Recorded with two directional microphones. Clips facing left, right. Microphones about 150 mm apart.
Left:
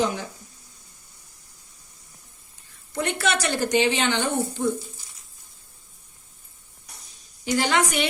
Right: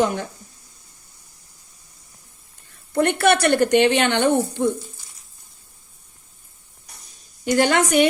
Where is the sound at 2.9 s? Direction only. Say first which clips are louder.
Right 8 dB; 60° right (ahead or behind).